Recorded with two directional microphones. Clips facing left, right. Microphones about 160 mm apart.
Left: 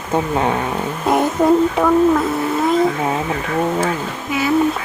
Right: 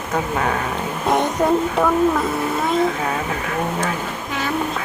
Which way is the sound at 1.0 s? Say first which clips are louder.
Left 3 dB; 5° left (ahead or behind).